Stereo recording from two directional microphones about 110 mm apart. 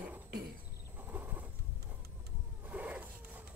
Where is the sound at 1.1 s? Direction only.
15° right (ahead or behind).